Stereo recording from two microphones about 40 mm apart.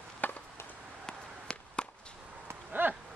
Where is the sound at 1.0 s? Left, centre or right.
Left.